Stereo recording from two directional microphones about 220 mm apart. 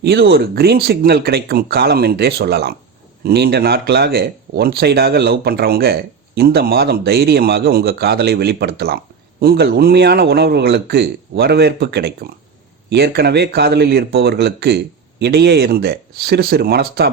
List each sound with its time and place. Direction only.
0.0 s speech: 45° right (ahead or behind)